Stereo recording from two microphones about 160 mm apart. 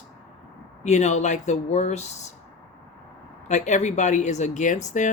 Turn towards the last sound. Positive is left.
turn(degrees=50)  # may be behind; listen again after turning